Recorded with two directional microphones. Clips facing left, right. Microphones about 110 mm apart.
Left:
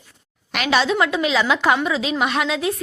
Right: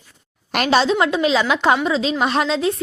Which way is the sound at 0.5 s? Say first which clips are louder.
Right 2 dB; 40° right (ahead or behind).